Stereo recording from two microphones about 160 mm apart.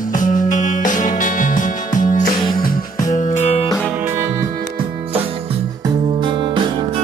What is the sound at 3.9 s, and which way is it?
Music, 15° right (ahead or behind).